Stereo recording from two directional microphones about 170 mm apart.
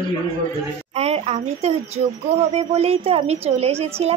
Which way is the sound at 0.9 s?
35° right (ahead or behind).